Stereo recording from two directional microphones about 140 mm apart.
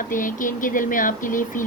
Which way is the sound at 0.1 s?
75° left (ahead or behind).